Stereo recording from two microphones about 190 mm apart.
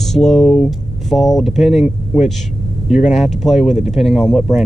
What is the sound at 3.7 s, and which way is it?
Speech, 35° left (ahead or behind).